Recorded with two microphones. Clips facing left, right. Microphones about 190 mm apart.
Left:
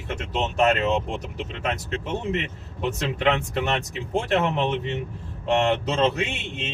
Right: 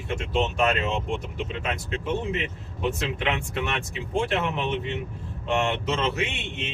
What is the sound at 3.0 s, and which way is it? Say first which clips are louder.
Speech: left 5 dB; 40° left (ahead or behind).